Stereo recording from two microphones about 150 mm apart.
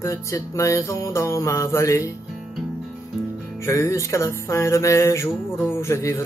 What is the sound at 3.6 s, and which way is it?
Music, 20° left (ahead or behind).